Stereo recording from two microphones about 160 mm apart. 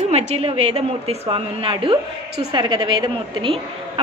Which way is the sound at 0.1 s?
40° right (ahead or behind).